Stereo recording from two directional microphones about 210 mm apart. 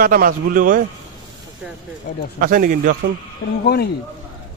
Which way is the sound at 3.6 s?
50° left (ahead or behind).